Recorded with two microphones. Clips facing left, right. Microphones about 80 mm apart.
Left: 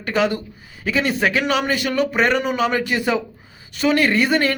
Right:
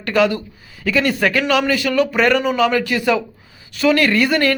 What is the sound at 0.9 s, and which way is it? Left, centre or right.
A man's voice, left.